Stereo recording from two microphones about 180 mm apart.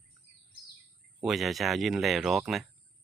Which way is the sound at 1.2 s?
Centre (ahead or behind).